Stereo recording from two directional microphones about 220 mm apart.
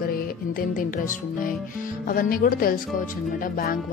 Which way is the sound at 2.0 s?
40° left (ahead or behind).